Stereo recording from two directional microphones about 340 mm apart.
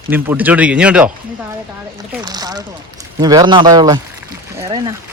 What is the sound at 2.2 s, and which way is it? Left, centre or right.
Speech, centre.